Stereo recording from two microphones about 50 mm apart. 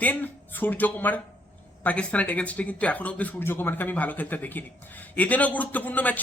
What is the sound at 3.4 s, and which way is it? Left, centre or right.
A man's voice, left.